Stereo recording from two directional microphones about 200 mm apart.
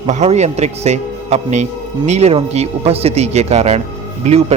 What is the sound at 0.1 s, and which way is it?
Speech, 35° right (ahead or behind).